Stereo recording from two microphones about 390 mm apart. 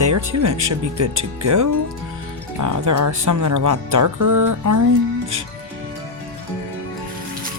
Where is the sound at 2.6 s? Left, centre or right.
Right.